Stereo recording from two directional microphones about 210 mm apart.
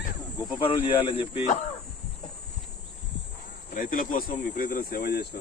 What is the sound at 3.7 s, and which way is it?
Speech, 40° left (ahead or behind).